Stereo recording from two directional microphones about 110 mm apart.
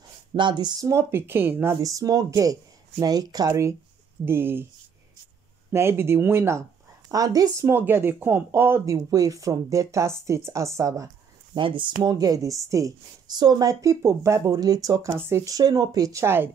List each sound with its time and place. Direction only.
0.3 s a sound: 45° right (ahead or behind)
0.8 s speech: 20° right (ahead or behind)
1.8 s speech: 30° right (ahead or behind)
4.2 s speech: 20° right (ahead or behind)
5.7 s speech: 20° right (ahead or behind)
7.1 s speech: 35° right (ahead or behind)
11.5 s speech: 50° right (ahead or behind); by 16.4 s 25° right (ahead or behind)